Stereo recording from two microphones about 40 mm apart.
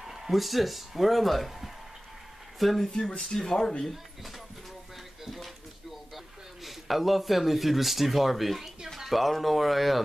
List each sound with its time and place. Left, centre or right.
0.0 s speech: centre
3.1 s speech: centre
3.8 s speech: centre
5.2 s a sound: centre